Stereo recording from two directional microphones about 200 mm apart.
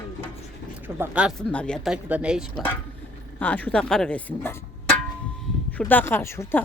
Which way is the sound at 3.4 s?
10° left (ahead or behind).